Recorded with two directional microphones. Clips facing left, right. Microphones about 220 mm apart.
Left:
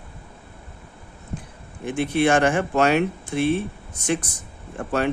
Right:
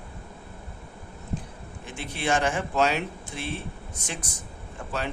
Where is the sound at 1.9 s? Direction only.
55° left (ahead or behind).